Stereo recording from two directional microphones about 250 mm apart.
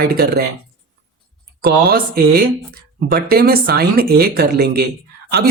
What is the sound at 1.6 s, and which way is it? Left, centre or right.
Speech, right.